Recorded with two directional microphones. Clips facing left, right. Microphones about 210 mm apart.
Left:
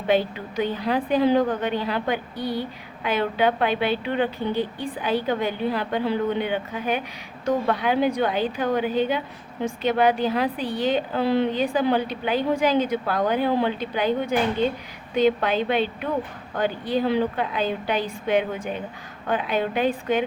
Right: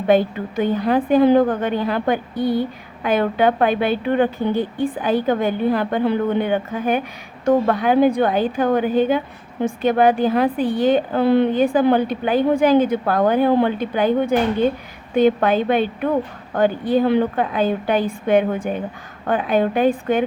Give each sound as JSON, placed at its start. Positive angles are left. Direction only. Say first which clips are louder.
{"t": 0.1, "sound": "a woman's voice", "louder": "right 5 dB", "side_deg": -50}